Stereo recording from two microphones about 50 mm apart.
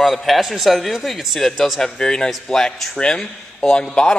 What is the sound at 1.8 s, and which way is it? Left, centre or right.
A man's voice, centre.